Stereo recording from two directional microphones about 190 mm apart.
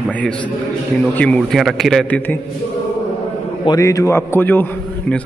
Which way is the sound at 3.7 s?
15° left (ahead or behind).